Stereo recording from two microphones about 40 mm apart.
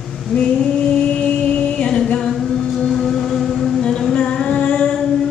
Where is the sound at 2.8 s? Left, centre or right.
Centre.